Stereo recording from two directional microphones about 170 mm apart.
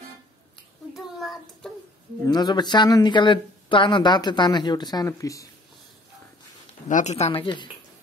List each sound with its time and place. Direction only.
0.9 s a child's voice: centre (ahead or behind)
2.2 s speech: 25° left (ahead or behind)
6.9 s speech: 45° left (ahead or behind); by 7.7 s 30° left (ahead or behind)